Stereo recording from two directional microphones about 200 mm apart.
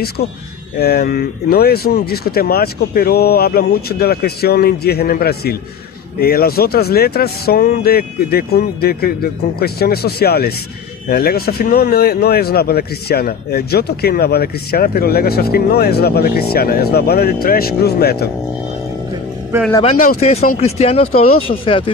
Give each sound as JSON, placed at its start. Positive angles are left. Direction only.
{"t": 0.2, "sound": "speech", "side_deg": 55}
{"t": 19.5, "sound": "speech", "side_deg": -10}
{"t": 20.2, "sound": "speech", "side_deg": 30}